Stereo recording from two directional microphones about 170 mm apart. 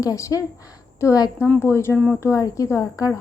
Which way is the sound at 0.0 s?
20° left (ahead or behind).